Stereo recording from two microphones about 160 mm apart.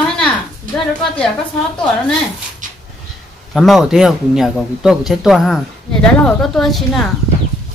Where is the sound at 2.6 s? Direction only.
55° right (ahead or behind).